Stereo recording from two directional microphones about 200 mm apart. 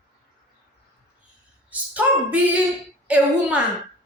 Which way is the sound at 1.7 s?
5° right (ahead or behind).